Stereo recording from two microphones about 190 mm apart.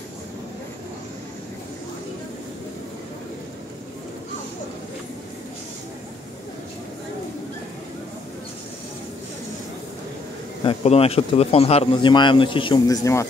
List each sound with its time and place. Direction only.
10.6 s speech: 30° left (ahead or behind)